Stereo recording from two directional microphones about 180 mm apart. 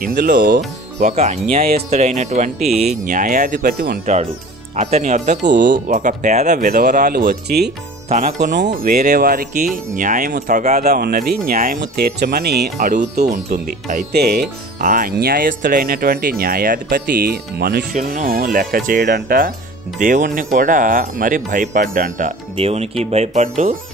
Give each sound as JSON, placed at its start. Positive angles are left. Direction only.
{"t": 0.0, "sound": "speech", "side_deg": -65}
{"t": 1.0, "sound": "speech", "side_deg": -35}
{"t": 3.7, "sound": "speech", "side_deg": -65}
{"t": 4.0, "sound": "speech", "side_deg": -40}
{"t": 6.7, "sound": "speech", "side_deg": -55}
{"t": 8.5, "sound": "speech", "side_deg": -45}
{"t": 10.9, "sound": "speech", "side_deg": -55}
{"t": 12.7, "sound": "speech", "side_deg": -45}
{"t": 14.8, "sound": "speech", "side_deg": -50}
{"t": 17.9, "sound": "speech", "side_deg": -45}
{"t": 22.6, "sound": "speech", "side_deg": -35}